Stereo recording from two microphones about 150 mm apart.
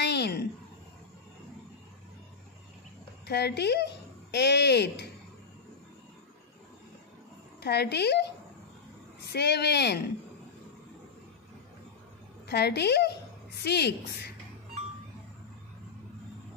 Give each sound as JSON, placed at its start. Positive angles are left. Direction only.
{"t": 0.0, "sound": "a sound", "side_deg": 90}
{"t": 3.3, "sound": "speech", "side_deg": 90}
{"t": 7.6, "sound": "speech", "side_deg": 90}
{"t": 9.3, "sound": "speech", "side_deg": 90}
{"t": 12.4, "sound": "speech", "side_deg": 90}